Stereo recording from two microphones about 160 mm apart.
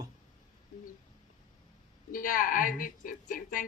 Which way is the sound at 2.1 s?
60° left (ahead or behind).